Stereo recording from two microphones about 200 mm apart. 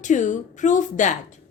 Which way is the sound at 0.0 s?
40° left (ahead or behind).